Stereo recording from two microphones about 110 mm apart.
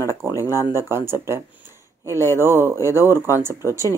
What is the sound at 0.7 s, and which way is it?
Speech, 20° right (ahead or behind).